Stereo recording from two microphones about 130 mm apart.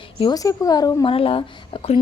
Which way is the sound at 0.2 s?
30° left (ahead or behind).